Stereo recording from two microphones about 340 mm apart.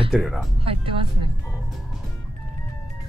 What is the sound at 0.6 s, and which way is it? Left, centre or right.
Speech, centre.